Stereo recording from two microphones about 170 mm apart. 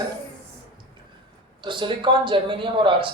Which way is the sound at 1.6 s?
30° right (ahead or behind).